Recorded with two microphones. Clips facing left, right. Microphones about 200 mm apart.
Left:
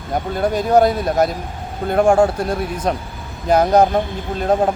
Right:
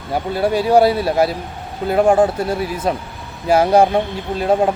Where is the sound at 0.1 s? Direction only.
5° right (ahead or behind).